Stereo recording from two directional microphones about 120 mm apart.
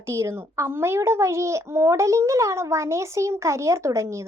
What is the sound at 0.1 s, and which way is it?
A child's voice, 25° right (ahead or behind).